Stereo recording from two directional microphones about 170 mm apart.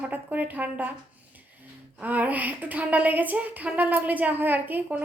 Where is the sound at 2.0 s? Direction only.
10° right (ahead or behind).